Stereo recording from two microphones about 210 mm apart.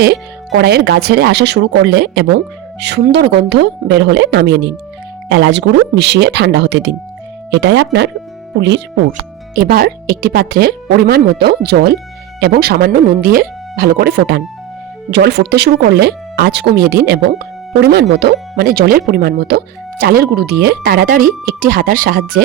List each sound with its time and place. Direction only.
0.0 s speech: 50° right (ahead or behind)
9.6 s speech: 45° right (ahead or behind)